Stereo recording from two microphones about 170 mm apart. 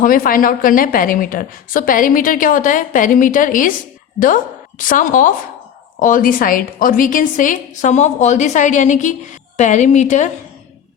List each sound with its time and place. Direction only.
0.0 s a woman's voice: 55° left (ahead or behind)
4.8 s a woman's voice: 50° left (ahead or behind)